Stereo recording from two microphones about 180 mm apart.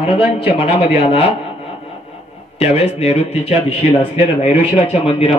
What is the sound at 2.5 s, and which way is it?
Speech, 35° left (ahead or behind).